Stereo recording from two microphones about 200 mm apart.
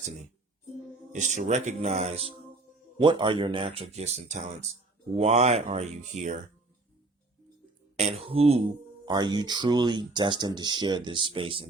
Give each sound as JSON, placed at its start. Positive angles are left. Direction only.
{"t": 1.1, "sound": "speech", "side_deg": -35}
{"t": 7.9, "sound": "speech", "side_deg": -30}